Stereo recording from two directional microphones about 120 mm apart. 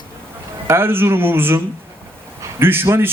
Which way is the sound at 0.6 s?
20° right (ahead or behind).